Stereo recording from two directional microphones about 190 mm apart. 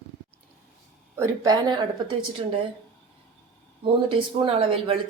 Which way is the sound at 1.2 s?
20° right (ahead or behind).